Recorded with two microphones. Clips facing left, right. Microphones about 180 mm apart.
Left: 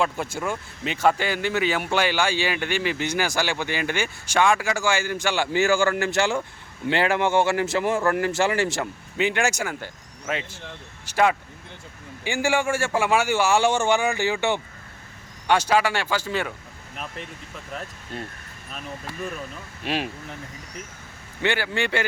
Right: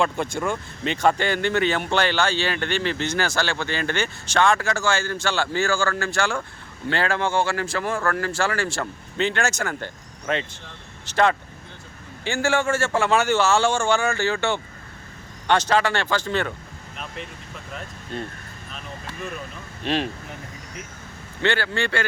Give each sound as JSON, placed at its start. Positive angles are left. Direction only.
{"t": 0.0, "sound": "speech", "side_deg": 5}
{"t": 19.8, "sound": "speech", "side_deg": 10}
{"t": 21.4, "sound": "speech", "side_deg": 15}